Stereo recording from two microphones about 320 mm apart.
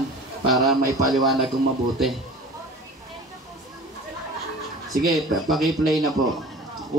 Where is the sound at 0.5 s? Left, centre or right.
Centre.